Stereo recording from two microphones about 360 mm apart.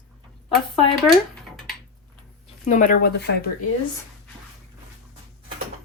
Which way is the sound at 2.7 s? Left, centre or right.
Left.